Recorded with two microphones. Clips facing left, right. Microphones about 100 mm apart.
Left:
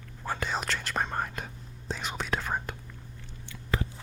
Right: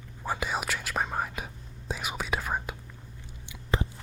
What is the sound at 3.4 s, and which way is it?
Biting, 20° right (ahead or behind).